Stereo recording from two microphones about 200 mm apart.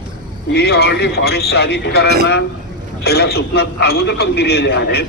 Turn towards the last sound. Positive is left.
turn(degrees=55)  # may be behind; listen again after turning